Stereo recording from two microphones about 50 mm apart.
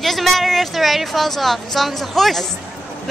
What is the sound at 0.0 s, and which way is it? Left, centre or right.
A woman's voice, centre.